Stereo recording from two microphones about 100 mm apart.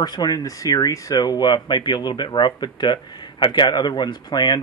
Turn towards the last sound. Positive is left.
turn(degrees=45)  # may be behind; listen again after turning